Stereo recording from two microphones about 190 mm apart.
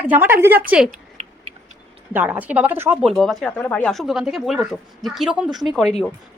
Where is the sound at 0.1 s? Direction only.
10° right (ahead or behind).